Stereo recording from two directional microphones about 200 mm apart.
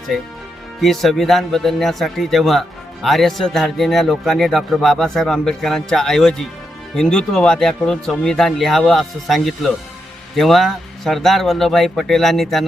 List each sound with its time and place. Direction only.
0.1 s speech: centre (ahead or behind)